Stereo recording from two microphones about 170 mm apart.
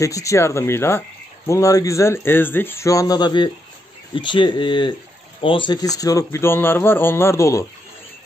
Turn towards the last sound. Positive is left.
turn(degrees=15)  # may be behind; listen again after turning